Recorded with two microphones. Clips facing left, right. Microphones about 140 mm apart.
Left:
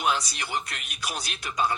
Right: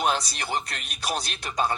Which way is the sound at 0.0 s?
35° right (ahead or behind).